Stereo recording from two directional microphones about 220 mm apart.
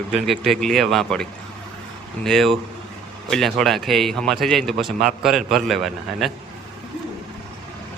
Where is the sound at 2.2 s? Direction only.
Centre (ahead or behind).